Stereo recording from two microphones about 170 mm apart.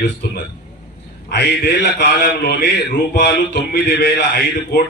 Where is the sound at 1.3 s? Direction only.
75° left (ahead or behind).